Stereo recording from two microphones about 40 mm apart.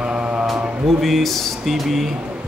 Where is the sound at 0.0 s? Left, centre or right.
Right.